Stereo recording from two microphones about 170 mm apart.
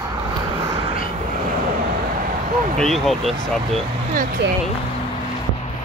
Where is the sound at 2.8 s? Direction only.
Centre (ahead or behind).